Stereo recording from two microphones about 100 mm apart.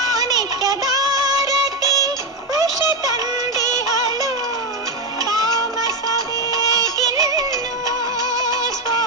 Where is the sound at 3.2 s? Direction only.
35° right (ahead or behind).